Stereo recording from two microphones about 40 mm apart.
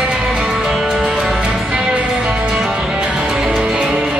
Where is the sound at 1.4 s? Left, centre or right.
Centre.